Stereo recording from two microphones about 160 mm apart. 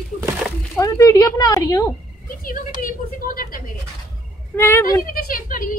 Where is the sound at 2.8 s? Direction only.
65° left (ahead or behind).